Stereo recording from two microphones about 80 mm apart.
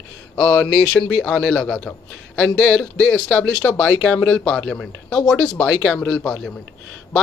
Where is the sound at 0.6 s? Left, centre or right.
Centre.